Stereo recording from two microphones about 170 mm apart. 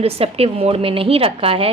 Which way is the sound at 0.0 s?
35° right (ahead or behind).